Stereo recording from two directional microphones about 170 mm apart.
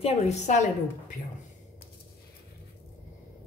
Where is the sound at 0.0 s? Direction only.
40° left (ahead or behind).